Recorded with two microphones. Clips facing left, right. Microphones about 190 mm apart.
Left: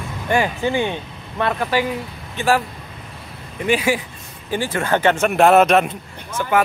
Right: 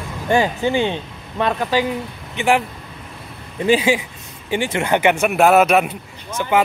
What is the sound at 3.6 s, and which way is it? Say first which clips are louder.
Speech: right 3 dB; 30° right (ahead or behind).